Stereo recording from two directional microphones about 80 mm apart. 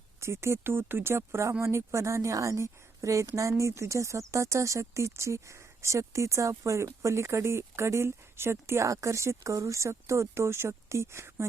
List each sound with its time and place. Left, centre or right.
0.2 s speech: right